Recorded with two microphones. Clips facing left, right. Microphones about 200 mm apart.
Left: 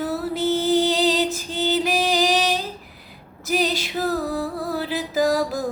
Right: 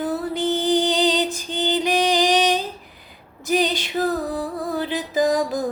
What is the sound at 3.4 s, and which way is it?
Music, 5° left (ahead or behind).